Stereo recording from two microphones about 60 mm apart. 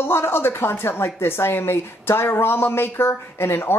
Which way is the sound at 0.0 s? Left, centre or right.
Left.